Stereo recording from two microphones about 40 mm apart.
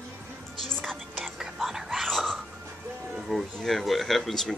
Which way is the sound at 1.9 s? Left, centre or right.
Centre.